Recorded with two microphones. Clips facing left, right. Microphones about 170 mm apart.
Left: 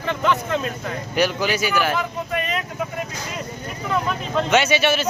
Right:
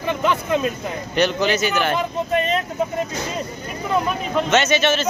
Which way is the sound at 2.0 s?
30° right (ahead or behind).